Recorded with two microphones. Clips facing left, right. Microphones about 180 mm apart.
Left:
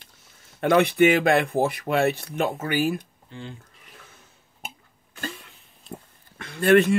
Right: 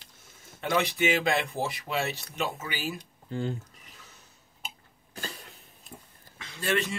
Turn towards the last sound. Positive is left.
turn(degrees=55)  # may be behind; listen again after turning